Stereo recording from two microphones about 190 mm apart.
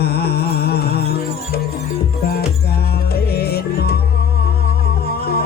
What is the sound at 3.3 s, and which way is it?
Music, 55° left (ahead or behind).